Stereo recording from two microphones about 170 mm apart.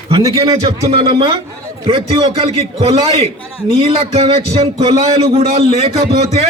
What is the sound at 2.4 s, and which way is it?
A man's voice, 35° right (ahead or behind).